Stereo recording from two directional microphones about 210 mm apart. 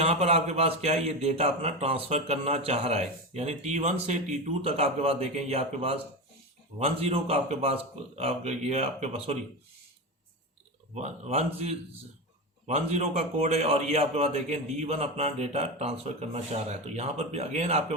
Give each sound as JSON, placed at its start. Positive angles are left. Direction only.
{"t": 0.0, "sound": "a man's voice", "side_deg": -30}
{"t": 10.9, "sound": "a man's voice", "side_deg": -30}